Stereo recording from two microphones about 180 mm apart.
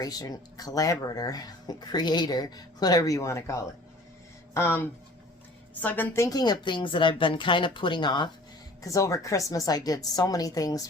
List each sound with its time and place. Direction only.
0.0 s speech: 20° left (ahead or behind)